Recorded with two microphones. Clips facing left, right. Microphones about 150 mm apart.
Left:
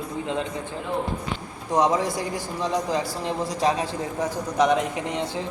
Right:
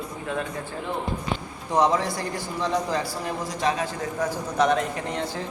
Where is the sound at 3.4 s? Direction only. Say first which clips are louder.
Left 3 dB; 35° left (ahead or behind).